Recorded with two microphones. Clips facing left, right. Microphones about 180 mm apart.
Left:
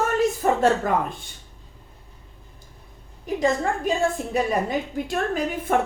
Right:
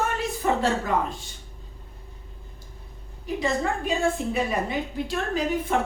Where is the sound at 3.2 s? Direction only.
45° left (ahead or behind).